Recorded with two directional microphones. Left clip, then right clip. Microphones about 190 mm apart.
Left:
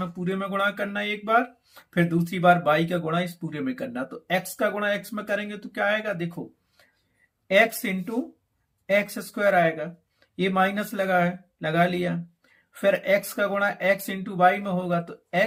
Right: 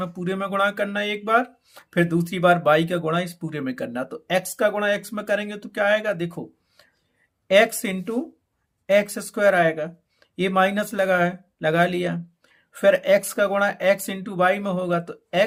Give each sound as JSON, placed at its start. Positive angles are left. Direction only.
{"t": 0.0, "sound": "speech", "side_deg": -40}